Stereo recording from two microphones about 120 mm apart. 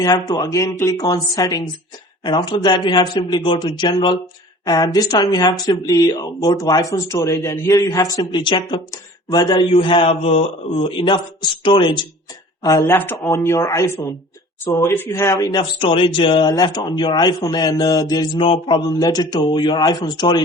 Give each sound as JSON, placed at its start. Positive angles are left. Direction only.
{"t": 0.0, "sound": "a man's voice", "side_deg": 30}
{"t": 8.3, "sound": "a man's voice", "side_deg": 40}
{"t": 12.6, "sound": "speech", "side_deg": 25}
{"t": 15.4, "sound": "a man's voice", "side_deg": 35}
{"t": 15.8, "sound": "a man's voice", "side_deg": 50}
{"t": 18.3, "sound": "a man's voice", "side_deg": 45}